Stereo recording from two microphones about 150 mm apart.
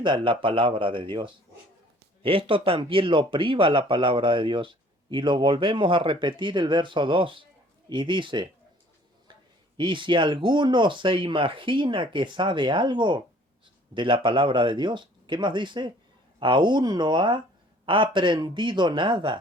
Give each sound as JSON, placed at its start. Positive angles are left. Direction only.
{"t": 0.0, "sound": "speech", "side_deg": -35}
{"t": 2.2, "sound": "speech", "side_deg": -40}
{"t": 9.7, "sound": "speech", "side_deg": -35}